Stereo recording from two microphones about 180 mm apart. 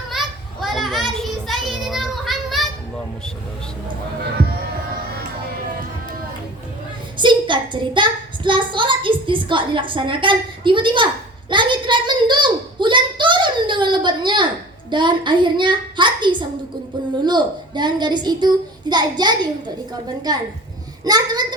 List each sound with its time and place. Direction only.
0.1 s child singing: centre (ahead or behind)
7.2 s child singing: 25° right (ahead or behind)
14.8 s a woman's voice: 25° right (ahead or behind)